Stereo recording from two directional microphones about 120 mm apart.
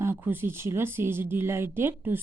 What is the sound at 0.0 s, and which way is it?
A woman's voice, 20° right (ahead or behind).